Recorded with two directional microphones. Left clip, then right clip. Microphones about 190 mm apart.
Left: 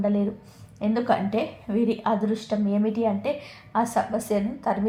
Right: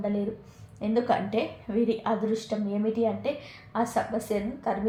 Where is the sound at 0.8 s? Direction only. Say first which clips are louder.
Left 2 dB; 30° left (ahead or behind).